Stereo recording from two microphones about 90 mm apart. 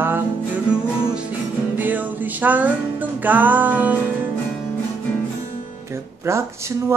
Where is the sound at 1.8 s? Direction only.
20° right (ahead or behind).